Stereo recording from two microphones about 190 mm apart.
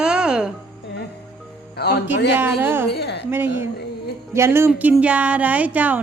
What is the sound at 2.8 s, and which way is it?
Speech, 60° left (ahead or behind).